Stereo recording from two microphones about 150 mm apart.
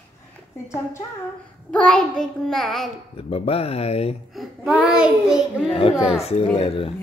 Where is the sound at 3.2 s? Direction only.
40° left (ahead or behind).